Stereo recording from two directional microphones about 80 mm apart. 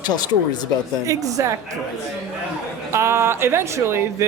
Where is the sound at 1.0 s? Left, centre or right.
Right.